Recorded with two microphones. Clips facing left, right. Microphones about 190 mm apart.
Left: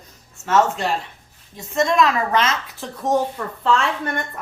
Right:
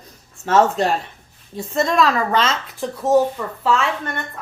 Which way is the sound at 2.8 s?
10° right (ahead or behind).